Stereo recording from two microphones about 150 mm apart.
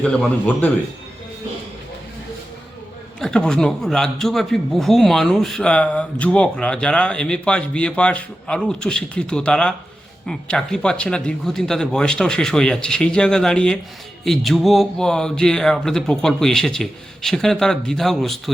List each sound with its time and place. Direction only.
0.0 s speech: 5° left (ahead or behind)
3.2 s a man's voice: 5° left (ahead or behind)